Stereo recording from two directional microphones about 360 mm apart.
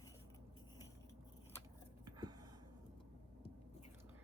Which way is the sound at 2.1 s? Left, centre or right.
Centre.